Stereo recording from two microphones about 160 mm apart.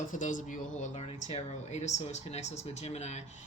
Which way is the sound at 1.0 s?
40° left (ahead or behind).